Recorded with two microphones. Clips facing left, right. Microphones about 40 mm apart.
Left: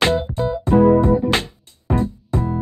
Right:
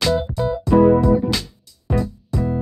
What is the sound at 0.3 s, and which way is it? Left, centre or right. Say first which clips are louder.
Music: even; left.